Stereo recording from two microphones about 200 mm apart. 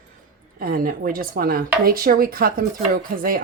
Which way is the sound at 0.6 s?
45° right (ahead or behind).